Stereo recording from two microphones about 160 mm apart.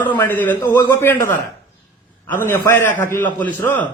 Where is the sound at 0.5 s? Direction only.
20° left (ahead or behind).